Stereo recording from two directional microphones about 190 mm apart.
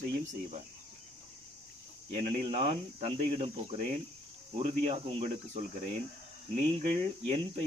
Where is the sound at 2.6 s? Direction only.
30° right (ahead or behind).